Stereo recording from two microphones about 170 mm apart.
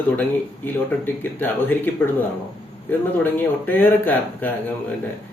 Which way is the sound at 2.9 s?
10° left (ahead or behind).